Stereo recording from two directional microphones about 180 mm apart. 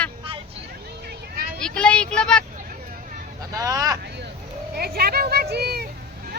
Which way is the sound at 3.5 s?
20° right (ahead or behind).